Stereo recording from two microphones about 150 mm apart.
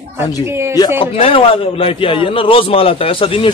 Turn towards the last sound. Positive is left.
turn(degrees=35)  # may be behind; listen again after turning